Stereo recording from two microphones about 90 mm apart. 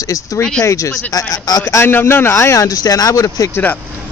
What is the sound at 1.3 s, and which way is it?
Speech, 45° left (ahead or behind).